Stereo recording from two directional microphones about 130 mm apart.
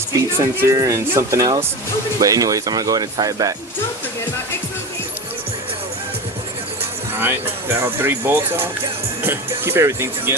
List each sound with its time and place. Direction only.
0.3 s speech: 25° right (ahead or behind)
7.2 s speech: 15° right (ahead or behind)